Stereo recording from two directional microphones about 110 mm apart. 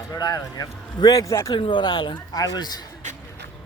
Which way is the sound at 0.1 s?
40° left (ahead or behind).